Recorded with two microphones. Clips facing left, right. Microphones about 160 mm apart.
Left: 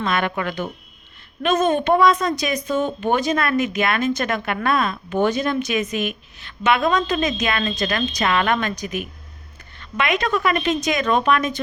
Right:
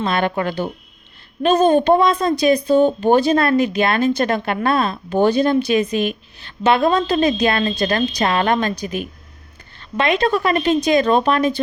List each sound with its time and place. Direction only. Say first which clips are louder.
0.0 s speech: right 3 dB; 30° right (ahead or behind)